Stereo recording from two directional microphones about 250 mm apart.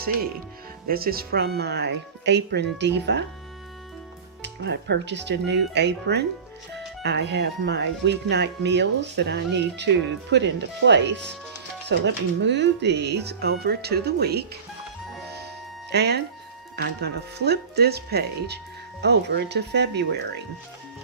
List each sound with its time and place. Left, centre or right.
0.9 s speech: right
4.4 s speech: right
15.9 s speech: right